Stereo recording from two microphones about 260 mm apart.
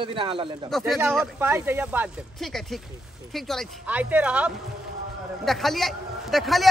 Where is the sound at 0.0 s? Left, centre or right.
Centre.